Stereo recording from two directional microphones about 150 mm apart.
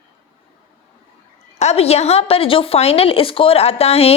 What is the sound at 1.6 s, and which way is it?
A woman's voice, 45° left (ahead or behind).